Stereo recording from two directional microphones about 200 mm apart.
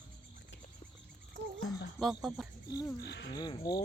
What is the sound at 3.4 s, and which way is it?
Speech, 20° left (ahead or behind).